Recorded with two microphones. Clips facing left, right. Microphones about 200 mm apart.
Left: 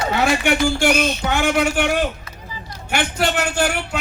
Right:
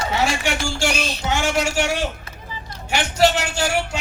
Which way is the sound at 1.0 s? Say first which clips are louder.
Left 6 dB; 35° right (ahead or behind).